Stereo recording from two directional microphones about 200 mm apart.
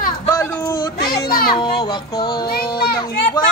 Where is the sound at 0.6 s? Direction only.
20° left (ahead or behind).